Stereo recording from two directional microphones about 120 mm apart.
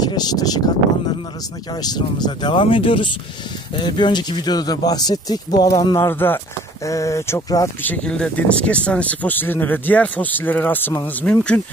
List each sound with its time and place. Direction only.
0.0 s speech: 35° left (ahead or behind)
1.7 s speech: 35° left (ahead or behind)
7.8 s speech: 10° left (ahead or behind)